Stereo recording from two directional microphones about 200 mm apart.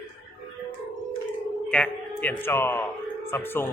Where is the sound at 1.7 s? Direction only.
5° left (ahead or behind).